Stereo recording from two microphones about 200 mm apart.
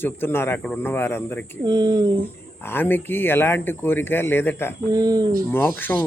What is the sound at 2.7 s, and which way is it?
Speech, 10° left (ahead or behind).